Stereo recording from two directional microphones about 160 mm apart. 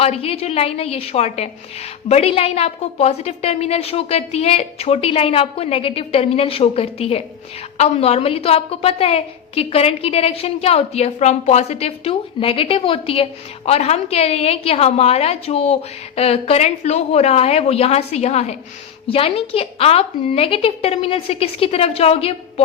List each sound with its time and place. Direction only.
0.0 s a woman's voice: 40° left (ahead or behind)